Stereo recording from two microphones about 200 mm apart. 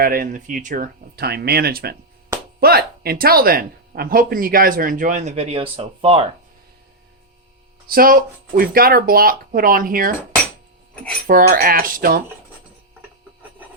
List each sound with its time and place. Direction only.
0.0 s speech: 45° right (ahead or behind); by 6.2 s 30° right (ahead or behind)
7.9 s speech: 45° right (ahead or behind)
11.3 s speech: 45° right (ahead or behind)